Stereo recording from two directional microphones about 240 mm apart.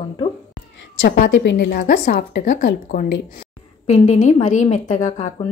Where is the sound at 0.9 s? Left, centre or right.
Left.